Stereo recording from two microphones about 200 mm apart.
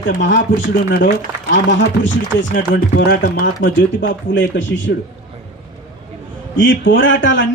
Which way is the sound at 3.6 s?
65° left (ahead or behind).